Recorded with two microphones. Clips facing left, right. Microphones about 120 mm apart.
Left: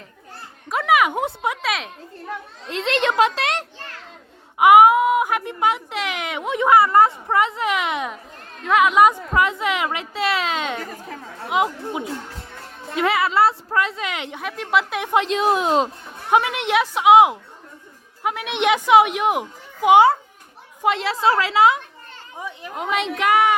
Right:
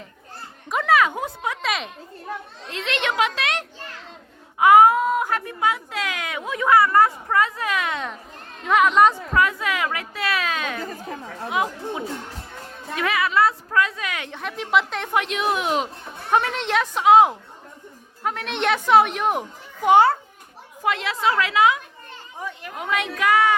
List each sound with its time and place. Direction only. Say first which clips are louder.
0.9 s speech: left 2 dB; 15° left (ahead or behind)
1.6 s a woman's voice: left 1 dB; centre (ahead or behind)
2.6 s a child's voice: left 5 dB; 30° left (ahead or behind)
4.5 s speech: left 2 dB; 15° left (ahead or behind)
8.6 s a woman's voice: left 1 dB; centre (ahead or behind)
9.3 s speech: left 1 dB; 20° left (ahead or behind)
14.4 s a woman's voice: even; centre (ahead or behind)
15.1 s a child's voice: left 4 dB; 30° left (ahead or behind)
16.3 s a child's voice: left 3 dB; 15° left (ahead or behind)
20.8 s speech: left 3 dB; 30° left (ahead or behind)
22.4 s speech: left 2 dB; 15° left (ahead or behind)